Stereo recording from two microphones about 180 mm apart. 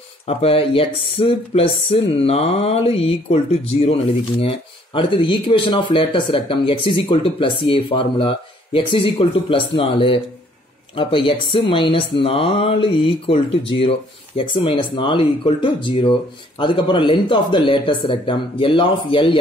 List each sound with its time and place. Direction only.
0.3 s speech: 35° left (ahead or behind)